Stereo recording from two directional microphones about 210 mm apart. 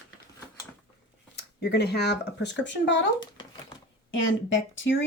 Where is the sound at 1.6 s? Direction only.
50° left (ahead or behind).